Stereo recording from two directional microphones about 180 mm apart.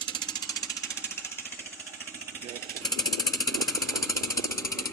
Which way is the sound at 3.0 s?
20° left (ahead or behind).